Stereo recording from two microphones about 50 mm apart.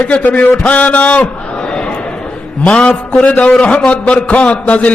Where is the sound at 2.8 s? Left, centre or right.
Centre.